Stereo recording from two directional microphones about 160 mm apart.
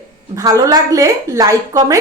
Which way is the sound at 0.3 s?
20° right (ahead or behind).